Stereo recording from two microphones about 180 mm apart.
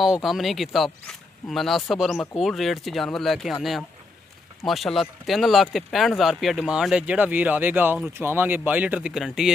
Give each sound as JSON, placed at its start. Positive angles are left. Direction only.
{"t": 0.0, "sound": "speech", "side_deg": 0}
{"t": 4.6, "sound": "speech", "side_deg": 0}